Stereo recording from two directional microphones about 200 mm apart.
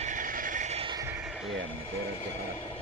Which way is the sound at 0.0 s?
40° right (ahead or behind).